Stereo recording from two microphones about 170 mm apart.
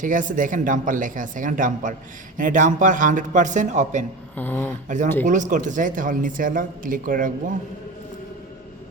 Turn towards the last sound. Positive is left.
turn(degrees=-50)  # may be behind; listen again after turning